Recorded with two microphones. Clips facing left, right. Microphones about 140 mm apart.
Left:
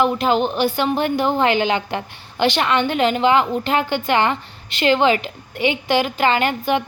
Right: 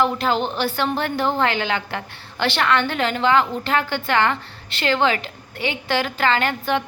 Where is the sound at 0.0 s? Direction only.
15° left (ahead or behind).